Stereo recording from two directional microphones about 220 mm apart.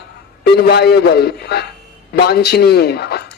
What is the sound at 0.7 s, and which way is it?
A man's voice, 45° left (ahead or behind).